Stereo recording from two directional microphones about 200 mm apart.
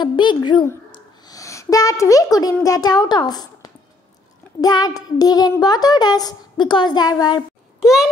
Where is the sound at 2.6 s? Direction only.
20° left (ahead or behind).